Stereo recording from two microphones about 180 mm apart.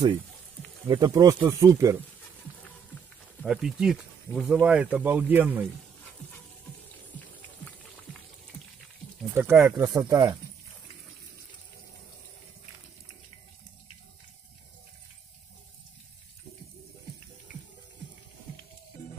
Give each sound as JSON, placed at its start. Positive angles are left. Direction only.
{"t": 0.8, "sound": "speech", "side_deg": -20}
{"t": 3.4, "sound": "speech", "side_deg": -5}
{"t": 9.3, "sound": "speech", "side_deg": -10}